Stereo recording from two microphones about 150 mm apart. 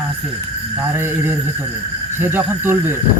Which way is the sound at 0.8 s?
15° right (ahead or behind).